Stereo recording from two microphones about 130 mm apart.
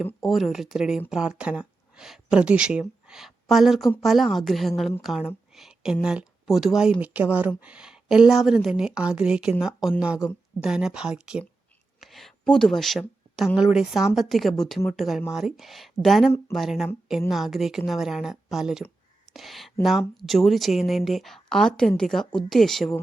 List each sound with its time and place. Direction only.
0.2 s a woman's voice: centre (ahead or behind)